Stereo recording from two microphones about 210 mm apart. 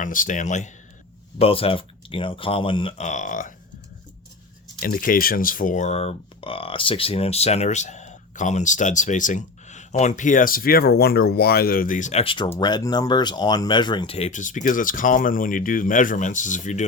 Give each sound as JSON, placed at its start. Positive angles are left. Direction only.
{"t": 0.0, "sound": "speech", "side_deg": 40}
{"t": 4.8, "sound": "speech", "side_deg": 40}